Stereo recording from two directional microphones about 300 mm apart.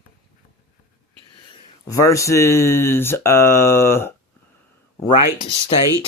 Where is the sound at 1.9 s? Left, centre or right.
Centre.